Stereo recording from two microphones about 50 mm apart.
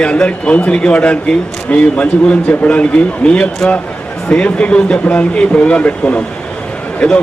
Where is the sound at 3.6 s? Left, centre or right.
Centre.